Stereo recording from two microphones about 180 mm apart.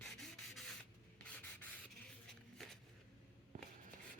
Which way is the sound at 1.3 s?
10° left (ahead or behind).